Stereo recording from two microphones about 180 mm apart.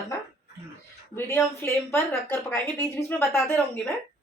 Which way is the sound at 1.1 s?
15° left (ahead or behind).